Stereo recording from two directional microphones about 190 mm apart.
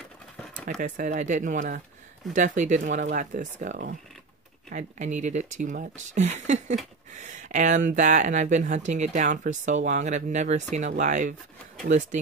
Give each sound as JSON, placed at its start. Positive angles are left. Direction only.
{"t": 0.7, "sound": "speech", "side_deg": -45}